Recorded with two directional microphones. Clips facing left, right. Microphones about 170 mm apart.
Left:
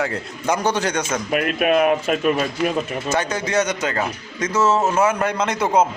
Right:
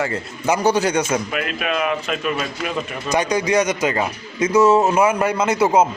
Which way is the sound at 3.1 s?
15° right (ahead or behind).